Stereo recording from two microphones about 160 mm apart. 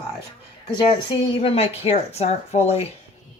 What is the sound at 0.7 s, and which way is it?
Speech, 30° left (ahead or behind).